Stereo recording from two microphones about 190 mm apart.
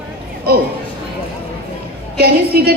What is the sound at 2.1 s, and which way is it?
Speech, 55° right (ahead or behind).